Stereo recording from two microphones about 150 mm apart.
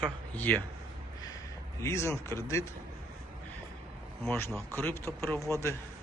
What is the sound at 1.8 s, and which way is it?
Speech, 20° left (ahead or behind).